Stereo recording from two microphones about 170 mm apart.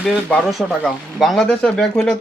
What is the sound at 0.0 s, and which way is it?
Speech, 5° left (ahead or behind).